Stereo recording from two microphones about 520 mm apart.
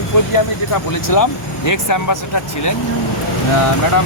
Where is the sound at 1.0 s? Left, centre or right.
Left.